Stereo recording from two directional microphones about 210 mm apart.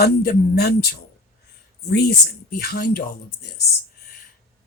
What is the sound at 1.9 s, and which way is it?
Speech, 50° left (ahead or behind).